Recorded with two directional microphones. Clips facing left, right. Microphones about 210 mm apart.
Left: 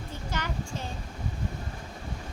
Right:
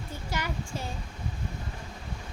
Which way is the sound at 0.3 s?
10° right (ahead or behind).